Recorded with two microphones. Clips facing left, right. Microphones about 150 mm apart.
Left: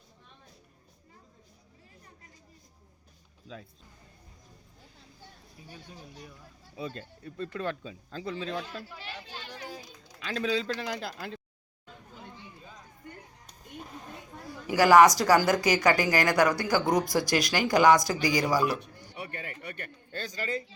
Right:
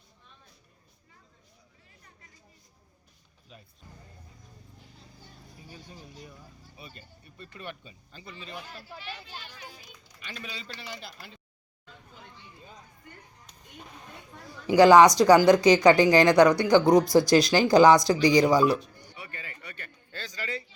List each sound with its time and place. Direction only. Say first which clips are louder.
5.5 s speech: even; centre (ahead or behind)
6.8 s speech: left 13 dB; 90° left
14.7 s speech: right 3 dB; 20° right (ahead or behind)
19.1 s a sound: left 5 dB; 60° left (ahead or behind)
20.1 s speech: left 3 dB; 45° left (ahead or behind)